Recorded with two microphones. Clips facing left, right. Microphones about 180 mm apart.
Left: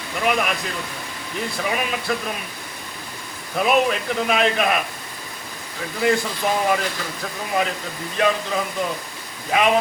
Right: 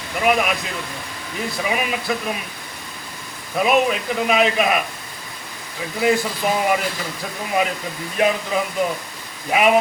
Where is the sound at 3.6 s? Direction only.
5° right (ahead or behind).